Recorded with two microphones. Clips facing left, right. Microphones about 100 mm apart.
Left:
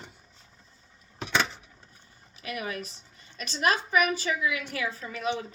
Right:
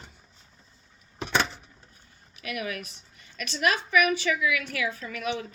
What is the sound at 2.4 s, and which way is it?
A woman's voice, 30° left (ahead or behind).